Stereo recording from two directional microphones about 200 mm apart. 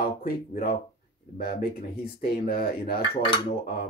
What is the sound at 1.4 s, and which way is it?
Speech, 50° left (ahead or behind).